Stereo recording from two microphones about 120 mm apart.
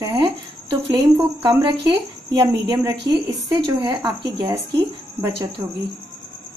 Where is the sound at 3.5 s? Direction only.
40° right (ahead or behind).